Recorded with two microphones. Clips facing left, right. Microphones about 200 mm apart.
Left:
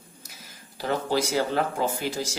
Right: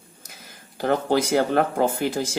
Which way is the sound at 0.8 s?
55° right (ahead or behind).